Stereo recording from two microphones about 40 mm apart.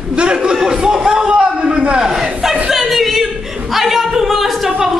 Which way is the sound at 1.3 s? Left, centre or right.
Right.